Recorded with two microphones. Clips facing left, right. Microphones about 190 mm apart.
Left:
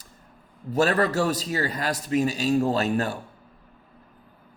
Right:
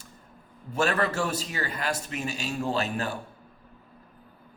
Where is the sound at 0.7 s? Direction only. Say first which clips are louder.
Left 4 dB; 40° left (ahead or behind).